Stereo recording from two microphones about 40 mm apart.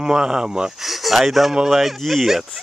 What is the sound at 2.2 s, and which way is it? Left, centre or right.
Speech, centre.